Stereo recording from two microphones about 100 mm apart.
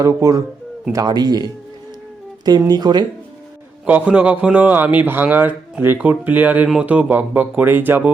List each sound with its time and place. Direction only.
0.0 s speech: 35° right (ahead or behind)
1.0 s speech: 45° right (ahead or behind)
3.8 s speech: 15° right (ahead or behind)